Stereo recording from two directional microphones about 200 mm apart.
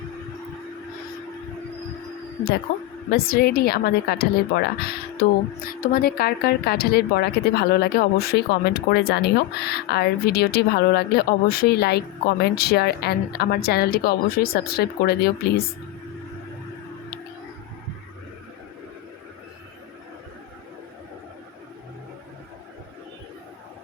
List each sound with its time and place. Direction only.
3.1 s speech: 50° left (ahead or behind)